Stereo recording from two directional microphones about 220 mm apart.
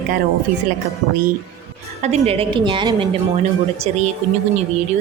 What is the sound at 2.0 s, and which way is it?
A woman's voice, 30° right (ahead or behind).